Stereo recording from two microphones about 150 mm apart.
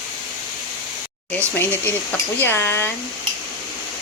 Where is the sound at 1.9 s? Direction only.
15° left (ahead or behind).